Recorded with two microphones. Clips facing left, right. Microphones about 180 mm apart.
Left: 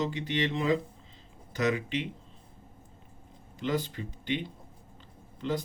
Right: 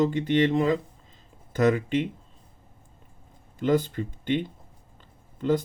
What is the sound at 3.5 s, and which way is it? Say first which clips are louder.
Speech: right 8 dB; 50° right (ahead or behind).